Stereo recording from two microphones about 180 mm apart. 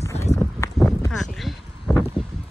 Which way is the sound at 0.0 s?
15° left (ahead or behind).